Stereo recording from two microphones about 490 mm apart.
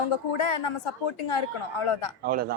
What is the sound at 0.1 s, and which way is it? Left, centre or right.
A woman's voice, left.